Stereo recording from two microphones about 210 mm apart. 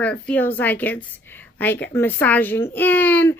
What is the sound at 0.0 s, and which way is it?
Speech, 5° left (ahead or behind).